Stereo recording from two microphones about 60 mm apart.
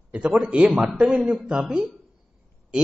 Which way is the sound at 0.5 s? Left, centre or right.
Centre.